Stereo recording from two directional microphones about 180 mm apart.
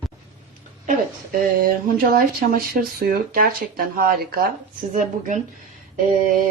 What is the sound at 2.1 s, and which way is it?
Speech, 50° right (ahead or behind).